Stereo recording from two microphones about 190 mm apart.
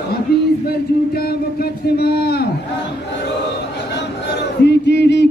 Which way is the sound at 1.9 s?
60° left (ahead or behind).